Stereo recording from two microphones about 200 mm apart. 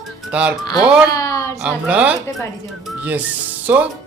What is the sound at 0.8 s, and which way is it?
Speech, 5° right (ahead or behind).